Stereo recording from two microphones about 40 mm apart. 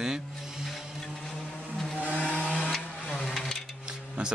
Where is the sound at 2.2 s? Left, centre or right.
Left.